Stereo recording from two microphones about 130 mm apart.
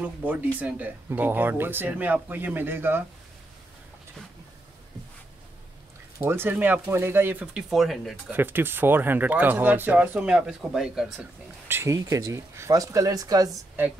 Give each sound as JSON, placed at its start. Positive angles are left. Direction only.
{"t": 0.0, "sound": "speech", "side_deg": -10}
{"t": 6.1, "sound": "speech", "side_deg": -15}
{"t": 7.7, "sound": "speech", "side_deg": 0}
{"t": 8.3, "sound": "speech", "side_deg": -15}
{"t": 11.6, "sound": "speech", "side_deg": -20}
{"t": 13.8, "sound": "speech", "side_deg": -15}